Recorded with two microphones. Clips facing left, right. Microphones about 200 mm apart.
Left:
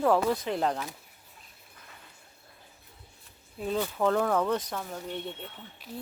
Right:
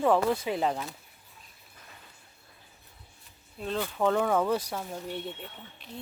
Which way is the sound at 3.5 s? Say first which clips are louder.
Left 1 dB; 10° left (ahead or behind).